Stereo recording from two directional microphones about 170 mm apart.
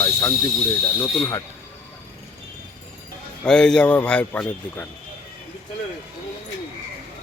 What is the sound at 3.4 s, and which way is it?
A man's voice, 5° left (ahead or behind).